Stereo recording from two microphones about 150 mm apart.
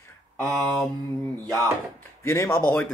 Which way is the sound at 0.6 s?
Centre (ahead or behind).